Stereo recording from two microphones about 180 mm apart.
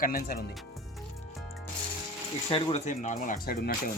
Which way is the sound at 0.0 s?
50° left (ahead or behind).